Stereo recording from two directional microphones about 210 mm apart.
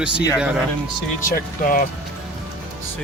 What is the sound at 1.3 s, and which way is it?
Speech, 40° left (ahead or behind).